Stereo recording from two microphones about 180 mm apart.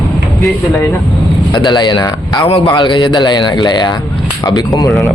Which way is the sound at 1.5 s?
25° left (ahead or behind).